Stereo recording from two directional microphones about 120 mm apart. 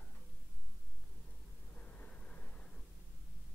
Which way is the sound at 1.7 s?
10° left (ahead or behind).